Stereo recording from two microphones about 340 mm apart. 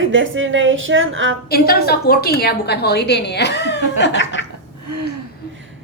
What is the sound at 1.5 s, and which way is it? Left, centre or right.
A woman's voice, left.